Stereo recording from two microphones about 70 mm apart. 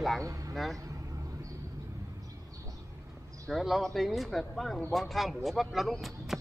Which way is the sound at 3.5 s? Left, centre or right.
Centre.